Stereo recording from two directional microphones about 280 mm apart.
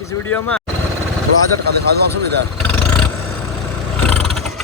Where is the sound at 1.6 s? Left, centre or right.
Right.